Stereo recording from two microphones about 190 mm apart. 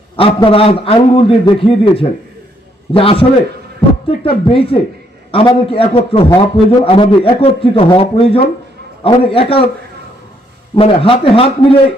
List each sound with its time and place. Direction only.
0.2 s a man's voice: 30° left (ahead or behind)
10.8 s a man's voice: 30° left (ahead or behind)